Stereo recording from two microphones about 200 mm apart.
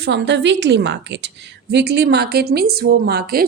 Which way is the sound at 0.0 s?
60° right (ahead or behind).